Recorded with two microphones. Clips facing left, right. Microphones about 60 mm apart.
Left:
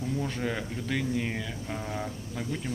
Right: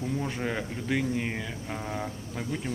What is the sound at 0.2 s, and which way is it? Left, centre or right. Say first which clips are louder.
Speech: even; centre.